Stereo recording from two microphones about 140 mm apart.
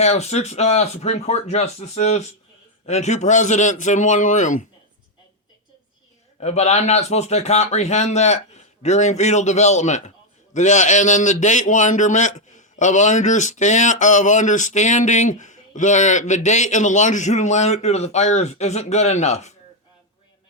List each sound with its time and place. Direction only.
0.0 s a man's voice: 50° left (ahead or behind)
6.4 s a man's voice: 50° left (ahead or behind)